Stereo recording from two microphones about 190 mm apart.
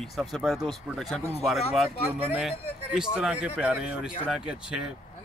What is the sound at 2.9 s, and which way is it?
Speech, 5° right (ahead or behind).